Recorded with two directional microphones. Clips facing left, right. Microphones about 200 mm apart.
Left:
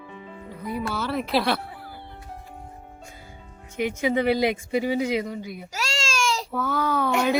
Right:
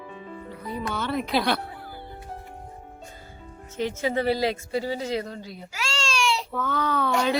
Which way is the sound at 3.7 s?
15° left (ahead or behind).